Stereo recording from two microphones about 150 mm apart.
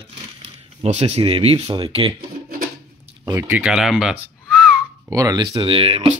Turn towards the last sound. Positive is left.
turn(degrees=-40)  # may be behind; listen again after turning